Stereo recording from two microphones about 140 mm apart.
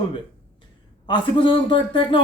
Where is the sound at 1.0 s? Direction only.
35° left (ahead or behind).